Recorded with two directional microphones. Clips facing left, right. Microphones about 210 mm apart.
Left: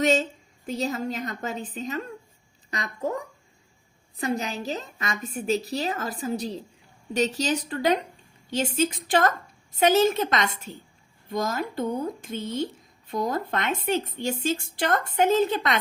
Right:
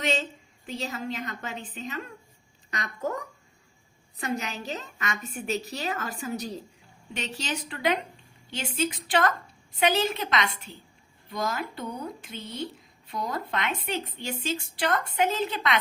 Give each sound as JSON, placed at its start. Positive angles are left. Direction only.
{"t": 0.0, "sound": "a woman's voice", "side_deg": 40}
{"t": 4.2, "sound": "a woman's voice", "side_deg": 35}